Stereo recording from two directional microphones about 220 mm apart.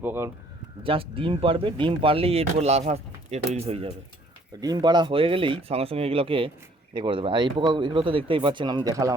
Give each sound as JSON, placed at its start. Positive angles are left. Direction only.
{"t": 0.0, "sound": "speech", "side_deg": -10}
{"t": 0.8, "sound": "speech", "side_deg": -25}